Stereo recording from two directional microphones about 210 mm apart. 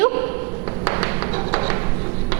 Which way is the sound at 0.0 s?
10° right (ahead or behind).